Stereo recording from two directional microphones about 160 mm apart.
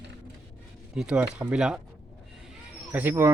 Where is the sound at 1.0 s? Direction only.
5° right (ahead or behind).